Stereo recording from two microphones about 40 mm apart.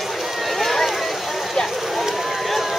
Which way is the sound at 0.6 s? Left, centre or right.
Centre.